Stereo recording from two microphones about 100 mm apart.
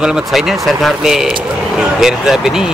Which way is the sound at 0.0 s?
5° right (ahead or behind).